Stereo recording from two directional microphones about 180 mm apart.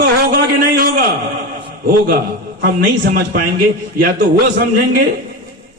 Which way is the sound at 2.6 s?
50° right (ahead or behind).